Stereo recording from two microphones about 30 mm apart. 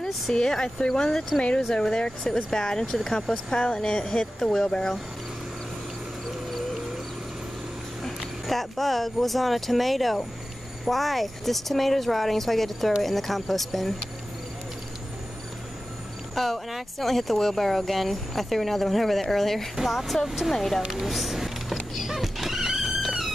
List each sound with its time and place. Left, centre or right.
0.3 s speech: left
3.6 s speech: left
4.4 s speech: left
6.6 s a sound: centre
8.0 s speech: centre
16.3 s a sound: centre
17.0 s a woman's voice: centre
19.7 s speech: centre
20.5 s a woman's voice: centre
20.9 s music: centre